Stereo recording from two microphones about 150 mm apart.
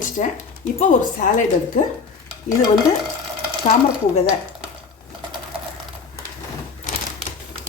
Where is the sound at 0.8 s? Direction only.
55° left (ahead or behind).